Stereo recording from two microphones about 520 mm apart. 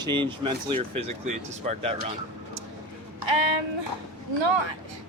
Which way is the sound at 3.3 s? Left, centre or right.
Right.